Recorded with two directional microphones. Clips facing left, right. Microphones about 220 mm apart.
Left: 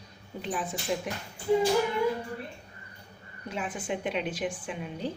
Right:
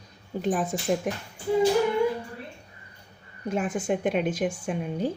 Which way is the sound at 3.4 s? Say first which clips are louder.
Right 7 dB; 50° right (ahead or behind).